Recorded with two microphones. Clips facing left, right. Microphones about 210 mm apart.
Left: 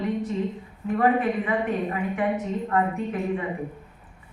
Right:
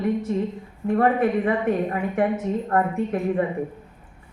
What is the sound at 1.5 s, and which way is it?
A woman's voice, 45° right (ahead or behind).